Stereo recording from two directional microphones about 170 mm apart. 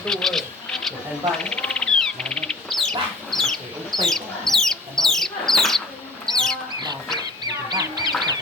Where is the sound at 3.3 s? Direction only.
Centre (ahead or behind).